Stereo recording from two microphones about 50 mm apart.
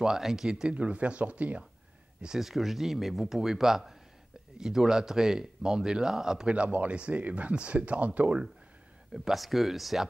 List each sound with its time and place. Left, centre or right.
0.0 s speech: centre; by 1.6 s right
2.2 s speech: centre
6.5 s speech: right
9.1 s speech: centre